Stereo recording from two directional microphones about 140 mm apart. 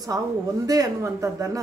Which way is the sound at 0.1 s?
20° right (ahead or behind).